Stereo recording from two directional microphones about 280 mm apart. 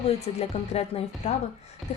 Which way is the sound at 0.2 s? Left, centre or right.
Left.